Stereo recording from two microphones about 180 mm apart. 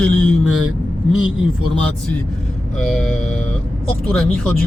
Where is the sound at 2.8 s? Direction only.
5° left (ahead or behind).